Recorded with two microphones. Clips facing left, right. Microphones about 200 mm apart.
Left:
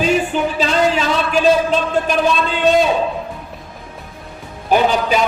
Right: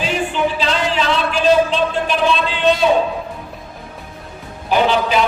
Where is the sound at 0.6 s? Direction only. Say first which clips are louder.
Left 3 dB; 45° left (ahead or behind).